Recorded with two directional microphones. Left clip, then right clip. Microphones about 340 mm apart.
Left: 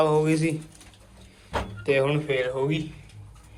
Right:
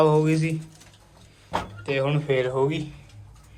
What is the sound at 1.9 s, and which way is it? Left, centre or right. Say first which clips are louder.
Speech: left 1 dB; centre.